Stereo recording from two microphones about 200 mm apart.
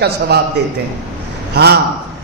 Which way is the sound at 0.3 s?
55° right (ahead or behind).